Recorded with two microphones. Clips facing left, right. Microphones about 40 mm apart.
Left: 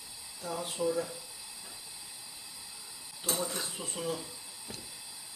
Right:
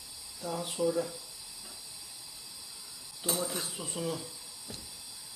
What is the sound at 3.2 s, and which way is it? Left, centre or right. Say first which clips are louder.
Speech: right 1 dB; centre.